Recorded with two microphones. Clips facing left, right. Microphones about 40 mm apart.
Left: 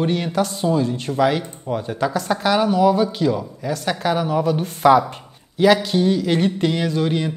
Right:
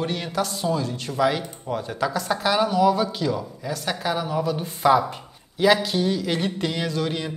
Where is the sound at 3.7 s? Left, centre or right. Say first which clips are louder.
Left 5 dB; left.